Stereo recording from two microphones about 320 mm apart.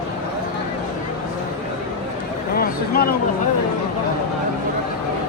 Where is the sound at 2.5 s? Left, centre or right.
Left.